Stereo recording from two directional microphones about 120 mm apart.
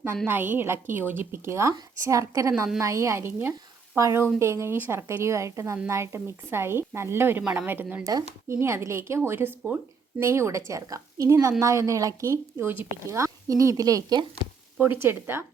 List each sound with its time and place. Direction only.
0.3 s a woman's voice: 15° right (ahead or behind); by 14.3 s 35° right (ahead or behind)
14.8 s a woman's voice: 20° right (ahead or behind)